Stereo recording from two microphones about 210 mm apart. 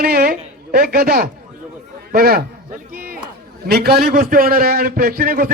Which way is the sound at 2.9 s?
45° right (ahead or behind).